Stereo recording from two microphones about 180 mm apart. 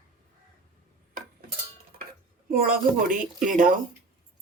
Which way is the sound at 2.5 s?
50° right (ahead or behind).